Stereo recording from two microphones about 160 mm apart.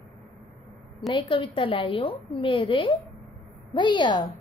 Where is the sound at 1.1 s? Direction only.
35° left (ahead or behind).